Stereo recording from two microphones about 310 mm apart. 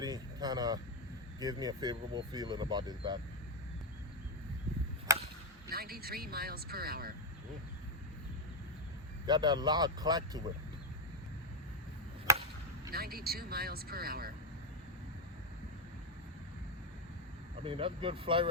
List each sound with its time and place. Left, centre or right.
0.0 s speech: centre
5.1 s chop: centre
5.6 s speech: right
9.2 s speech: centre
12.3 s chop: centre
12.9 s speech: right
17.6 s speech: centre